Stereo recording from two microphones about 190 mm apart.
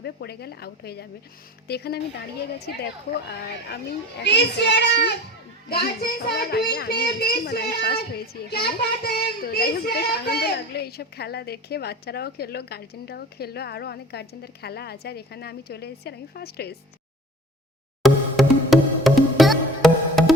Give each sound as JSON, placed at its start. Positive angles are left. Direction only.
{"t": 0.0, "sound": "a woman's voice", "side_deg": 55}
{"t": 18.0, "sound": "music", "side_deg": 0}